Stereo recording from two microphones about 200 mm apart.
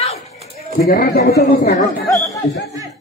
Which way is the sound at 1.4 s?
40° left (ahead or behind).